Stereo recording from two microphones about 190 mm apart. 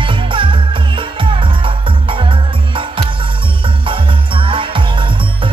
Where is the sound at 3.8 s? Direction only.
25° right (ahead or behind).